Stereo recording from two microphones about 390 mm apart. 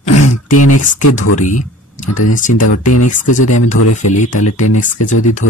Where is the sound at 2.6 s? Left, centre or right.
Left.